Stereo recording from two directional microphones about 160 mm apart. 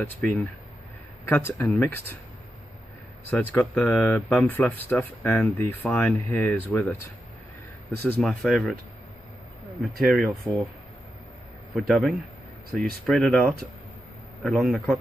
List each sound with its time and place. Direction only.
0.2 s speech: centre (ahead or behind)
1.3 s speech: 15° left (ahead or behind)
3.3 s speech: 10° left (ahead or behind)
8.2 s speech: centre (ahead or behind)
9.8 s speech: centre (ahead or behind)
11.9 s speech: centre (ahead or behind)
14.5 s a man's voice: 10° right (ahead or behind)